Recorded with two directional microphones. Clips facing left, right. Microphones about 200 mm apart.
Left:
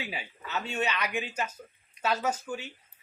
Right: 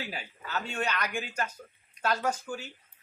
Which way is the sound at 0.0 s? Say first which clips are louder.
Left 1 dB; 5° left (ahead or behind).